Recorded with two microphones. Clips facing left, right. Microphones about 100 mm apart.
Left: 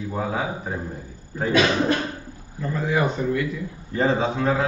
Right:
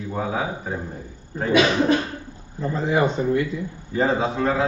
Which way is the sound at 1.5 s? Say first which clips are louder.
Right 2 dB; 15° right (ahead or behind).